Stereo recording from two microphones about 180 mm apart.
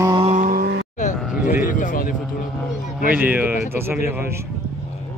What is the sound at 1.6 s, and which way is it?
Music, 45° left (ahead or behind).